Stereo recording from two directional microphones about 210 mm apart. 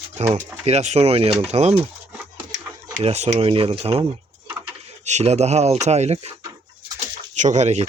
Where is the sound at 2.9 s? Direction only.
30° right (ahead or behind).